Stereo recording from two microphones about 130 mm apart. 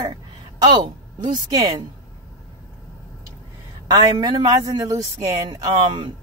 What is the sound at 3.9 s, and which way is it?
Speech, 30° right (ahead or behind).